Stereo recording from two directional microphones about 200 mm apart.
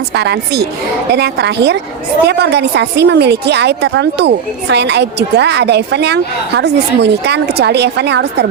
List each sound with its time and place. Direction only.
0.1 s a woman's voice: 55° right (ahead or behind)